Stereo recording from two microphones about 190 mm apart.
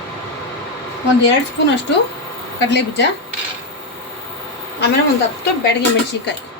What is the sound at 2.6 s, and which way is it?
Speech, 65° left (ahead or behind).